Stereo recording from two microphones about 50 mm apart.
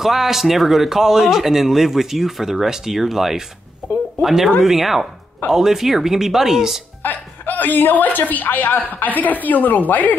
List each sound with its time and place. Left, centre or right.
0.0 s speech: centre
3.8 s a sound: centre
4.2 s speech: centre
7.0 s a woman's voice: left